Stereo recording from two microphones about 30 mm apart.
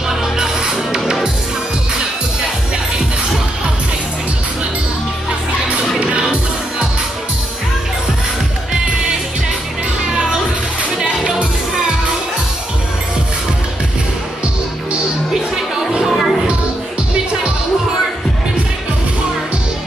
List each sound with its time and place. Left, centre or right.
0.4 s music: right
5.7 s music: right
16.1 s music: centre